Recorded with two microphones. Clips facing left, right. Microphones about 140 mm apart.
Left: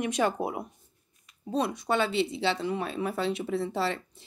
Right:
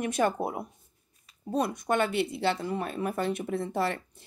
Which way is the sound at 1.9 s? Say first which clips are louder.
Even; 55° right (ahead or behind).